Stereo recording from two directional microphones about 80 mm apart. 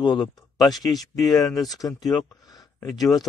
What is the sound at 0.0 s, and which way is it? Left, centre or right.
Speech, left.